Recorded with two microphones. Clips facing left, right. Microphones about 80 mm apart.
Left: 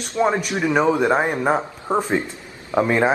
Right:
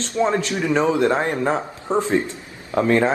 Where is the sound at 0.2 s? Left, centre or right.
Centre.